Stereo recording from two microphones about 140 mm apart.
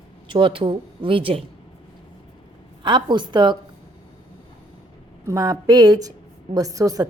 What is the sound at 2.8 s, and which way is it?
Speech, 35° right (ahead or behind).